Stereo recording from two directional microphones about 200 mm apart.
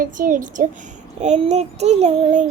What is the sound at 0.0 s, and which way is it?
Speech, 40° right (ahead or behind).